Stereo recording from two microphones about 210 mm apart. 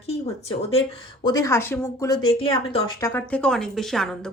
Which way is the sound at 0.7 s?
25° left (ahead or behind).